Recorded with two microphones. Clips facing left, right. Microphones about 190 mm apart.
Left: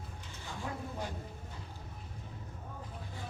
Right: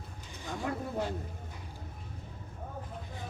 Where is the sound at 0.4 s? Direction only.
55° right (ahead or behind).